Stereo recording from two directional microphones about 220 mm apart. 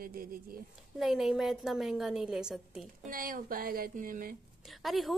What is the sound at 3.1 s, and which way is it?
A woman's voice, 40° right (ahead or behind).